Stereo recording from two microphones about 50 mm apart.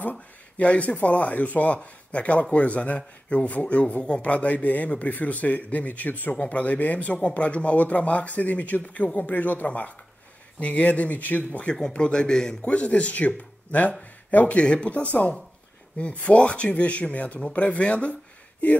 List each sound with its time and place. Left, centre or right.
0.0 s a man's voice: left
11.6 s speech: centre
12.6 s speech: left
14.6 s speech: left